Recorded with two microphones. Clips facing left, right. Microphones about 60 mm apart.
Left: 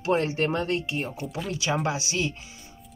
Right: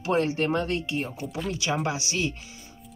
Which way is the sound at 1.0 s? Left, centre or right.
Centre.